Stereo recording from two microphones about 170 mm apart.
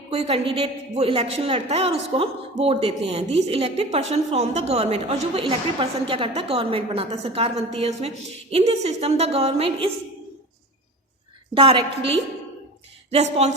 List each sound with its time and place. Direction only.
0.1 s a woman's voice: 35° right (ahead or behind)
11.5 s a woman's voice: 30° right (ahead or behind)